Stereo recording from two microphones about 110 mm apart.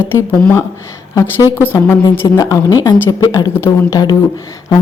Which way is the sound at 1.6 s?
20° left (ahead or behind).